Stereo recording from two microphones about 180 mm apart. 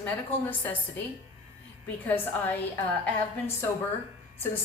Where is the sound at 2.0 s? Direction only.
10° left (ahead or behind).